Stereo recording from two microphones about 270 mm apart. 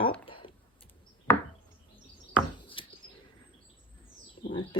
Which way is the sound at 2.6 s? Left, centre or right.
Centre.